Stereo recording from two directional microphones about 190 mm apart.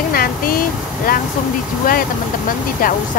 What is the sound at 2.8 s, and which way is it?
Speech, 50° left (ahead or behind).